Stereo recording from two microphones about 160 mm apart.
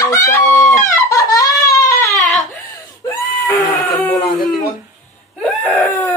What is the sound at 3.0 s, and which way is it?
Screaming, 20° left (ahead or behind).